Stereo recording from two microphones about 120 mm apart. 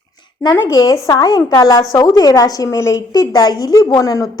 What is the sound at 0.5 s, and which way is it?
A woman's voice, 30° left (ahead or behind).